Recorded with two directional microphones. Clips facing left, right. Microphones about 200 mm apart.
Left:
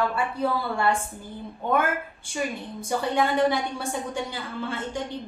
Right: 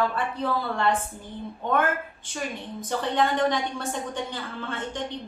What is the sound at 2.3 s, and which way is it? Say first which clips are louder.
A woman's voice: left 3 dB; 10° left (ahead or behind).